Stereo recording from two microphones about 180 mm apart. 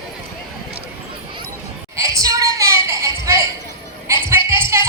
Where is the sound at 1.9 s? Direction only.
15° right (ahead or behind).